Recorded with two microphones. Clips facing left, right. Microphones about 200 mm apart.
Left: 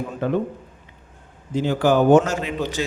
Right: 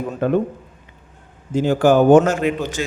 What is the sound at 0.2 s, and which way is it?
Speech, 55° right (ahead or behind).